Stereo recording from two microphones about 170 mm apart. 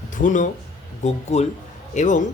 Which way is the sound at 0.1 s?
50° left (ahead or behind).